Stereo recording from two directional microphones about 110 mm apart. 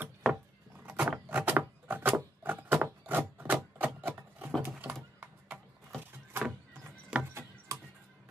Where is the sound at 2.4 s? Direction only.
15° right (ahead or behind).